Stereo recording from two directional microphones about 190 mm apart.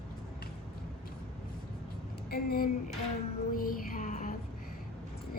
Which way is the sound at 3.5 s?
50° left (ahead or behind).